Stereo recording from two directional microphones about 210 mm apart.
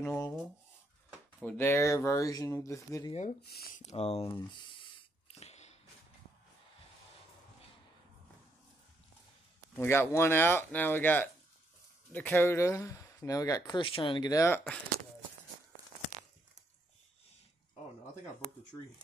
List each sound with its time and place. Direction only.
0.0 s speech: 10° left (ahead or behind)
1.4 s speech: 10° left (ahead or behind)
3.1 s speech: 35° left (ahead or behind)
3.4 s speech: 50° left (ahead or behind)
3.8 s speech: 30° left (ahead or behind)
5.3 s a sound: 30° left (ahead or behind)
9.8 s speech: 10° left (ahead or behind)